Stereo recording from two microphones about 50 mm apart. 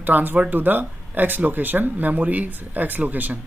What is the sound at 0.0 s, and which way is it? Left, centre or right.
Speech, right.